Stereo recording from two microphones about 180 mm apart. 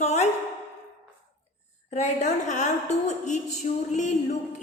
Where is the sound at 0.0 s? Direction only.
40° left (ahead or behind).